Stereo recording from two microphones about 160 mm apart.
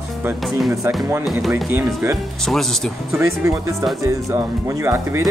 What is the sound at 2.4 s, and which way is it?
Speech, centre (ahead or behind).